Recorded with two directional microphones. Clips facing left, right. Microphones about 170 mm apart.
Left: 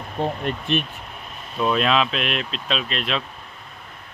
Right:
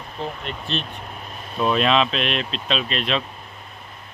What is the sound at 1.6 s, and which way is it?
Speech, centre (ahead or behind).